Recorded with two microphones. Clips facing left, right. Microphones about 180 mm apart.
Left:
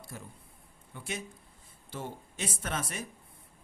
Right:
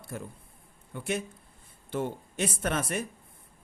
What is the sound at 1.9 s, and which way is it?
Speech, 60° right (ahead or behind).